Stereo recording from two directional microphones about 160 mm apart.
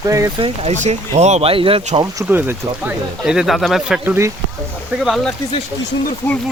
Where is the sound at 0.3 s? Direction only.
35° right (ahead or behind).